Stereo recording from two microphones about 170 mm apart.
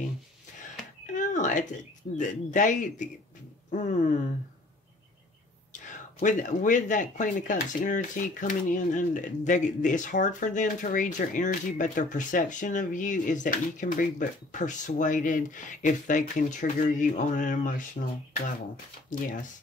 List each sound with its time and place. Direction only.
1.1 s a sound: 45° left (ahead or behind)
2.1 s speech: 45° left (ahead or behind)
5.7 s speech: 50° left (ahead or behind)